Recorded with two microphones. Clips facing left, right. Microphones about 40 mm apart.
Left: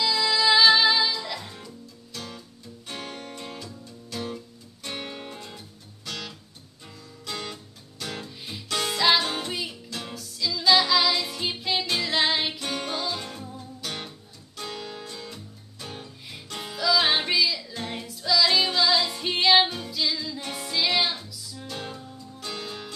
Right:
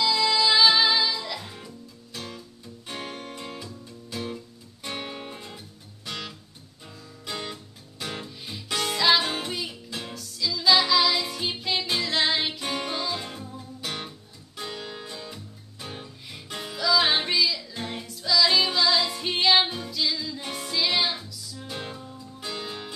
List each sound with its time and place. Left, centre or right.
0.7 s music: centre
2.9 s music: centre
6.0 s music: centre
7.2 s guitar: centre
8.0 s music: centre
8.4 s music: centre
9.2 s music: centre
9.5 s music: centre
12.5 s music: centre
12.8 s music: centre
13.7 s music: centre
16.6 s music: centre
21.6 s music: centre